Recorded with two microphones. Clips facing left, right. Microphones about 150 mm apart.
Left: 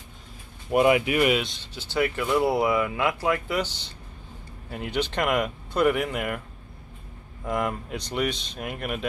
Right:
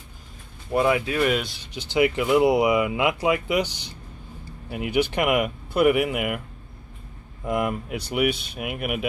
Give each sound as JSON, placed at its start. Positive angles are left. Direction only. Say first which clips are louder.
{"t": 0.7, "sound": "speech", "louder": "left 2 dB", "side_deg": 15}
{"t": 1.3, "sound": "speech", "louder": "even", "side_deg": 0}
{"t": 1.6, "sound": "speech", "louder": "right 4 dB", "side_deg": -15}
{"t": 7.4, "sound": "speech", "louder": "right 2 dB", "side_deg": -5}